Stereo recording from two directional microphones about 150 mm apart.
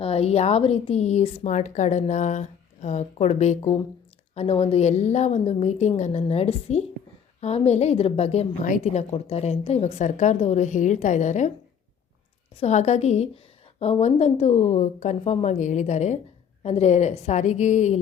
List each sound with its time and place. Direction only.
0.0 s a woman's voice: 40° left (ahead or behind)
12.5 s a woman's voice: 50° left (ahead or behind)